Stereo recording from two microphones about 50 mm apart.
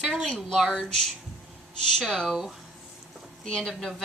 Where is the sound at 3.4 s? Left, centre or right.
Centre.